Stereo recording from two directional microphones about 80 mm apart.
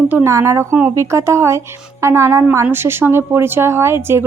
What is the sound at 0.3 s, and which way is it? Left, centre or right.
A woman's voice, right.